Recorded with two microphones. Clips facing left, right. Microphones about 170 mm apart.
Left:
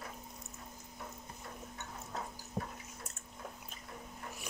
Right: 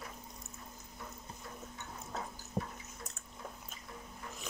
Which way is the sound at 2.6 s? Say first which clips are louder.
Right 2 dB; 40° right (ahead or behind).